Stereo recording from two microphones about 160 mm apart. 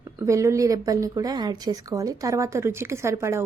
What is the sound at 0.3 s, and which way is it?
A woman's voice, 20° right (ahead or behind).